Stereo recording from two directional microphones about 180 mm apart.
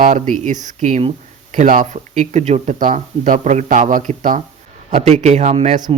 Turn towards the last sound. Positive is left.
turn(degrees=-40)  # may be behind; listen again after turning